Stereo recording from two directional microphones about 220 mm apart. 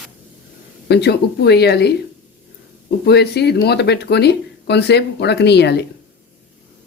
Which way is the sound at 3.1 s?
50° left (ahead or behind).